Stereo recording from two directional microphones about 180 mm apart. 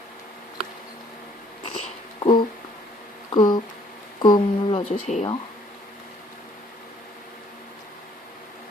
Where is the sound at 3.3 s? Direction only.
25° left (ahead or behind).